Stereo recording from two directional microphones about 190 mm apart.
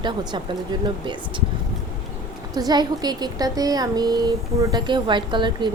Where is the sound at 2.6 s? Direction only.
20° right (ahead or behind).